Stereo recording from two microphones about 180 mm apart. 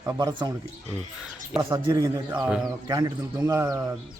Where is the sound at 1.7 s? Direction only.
20° right (ahead or behind).